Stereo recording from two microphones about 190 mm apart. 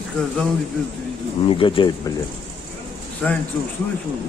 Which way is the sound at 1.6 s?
25° left (ahead or behind).